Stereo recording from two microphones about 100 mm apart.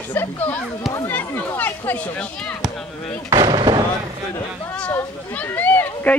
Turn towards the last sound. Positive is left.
turn(degrees=20)  # may be behind; listen again after turning